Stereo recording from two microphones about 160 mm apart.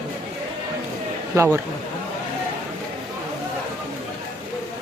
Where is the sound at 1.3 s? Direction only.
15° right (ahead or behind).